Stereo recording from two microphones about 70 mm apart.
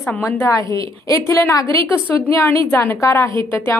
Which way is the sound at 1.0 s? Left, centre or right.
Left.